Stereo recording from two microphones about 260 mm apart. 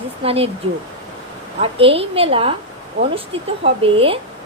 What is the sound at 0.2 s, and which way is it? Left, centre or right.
Speech, right.